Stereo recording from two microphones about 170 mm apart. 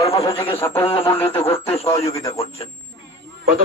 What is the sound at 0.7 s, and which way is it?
Speech, 30° left (ahead or behind).